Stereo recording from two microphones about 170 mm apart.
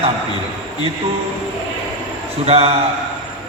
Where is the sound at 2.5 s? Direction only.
35° right (ahead or behind).